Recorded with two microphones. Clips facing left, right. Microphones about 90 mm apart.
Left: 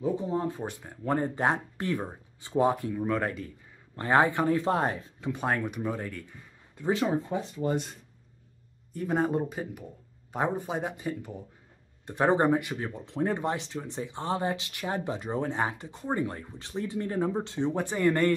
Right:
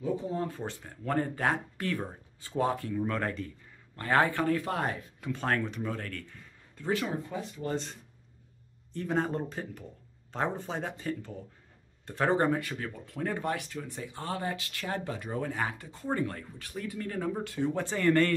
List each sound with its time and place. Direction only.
0.0 s speech: 20° left (ahead or behind)
3.9 s speech: 20° left (ahead or behind)
8.9 s speech: 10° left (ahead or behind)